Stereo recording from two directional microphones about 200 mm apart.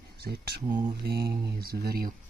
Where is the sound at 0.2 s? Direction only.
55° right (ahead or behind).